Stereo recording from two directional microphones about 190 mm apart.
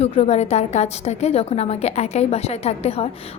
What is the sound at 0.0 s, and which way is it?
A woman's voice, 35° left (ahead or behind).